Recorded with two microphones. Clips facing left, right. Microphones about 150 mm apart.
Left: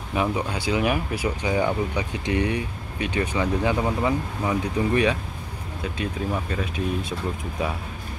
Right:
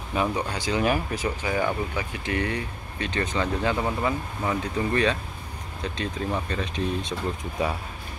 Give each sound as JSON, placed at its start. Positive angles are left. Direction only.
{"t": 0.1, "sound": "speech", "side_deg": 10}